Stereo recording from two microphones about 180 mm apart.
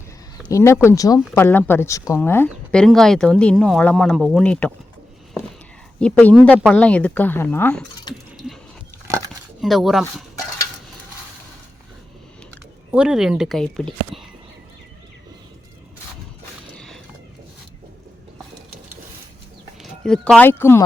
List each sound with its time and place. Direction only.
0.4 s a woman's voice: 15° left (ahead or behind)
2.5 s a woman's voice: centre (ahead or behind)
6.0 s a woman's voice: 5° left (ahead or behind)
9.6 s speech: centre (ahead or behind)
12.9 s speech: 5° right (ahead or behind)
16.7 s a sound: 5° left (ahead or behind)
19.8 s speech: 5° left (ahead or behind)